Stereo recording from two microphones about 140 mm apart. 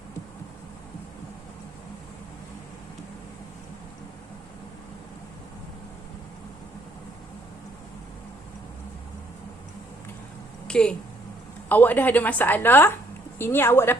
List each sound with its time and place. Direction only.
10.7 s a woman's voice: 5° left (ahead or behind)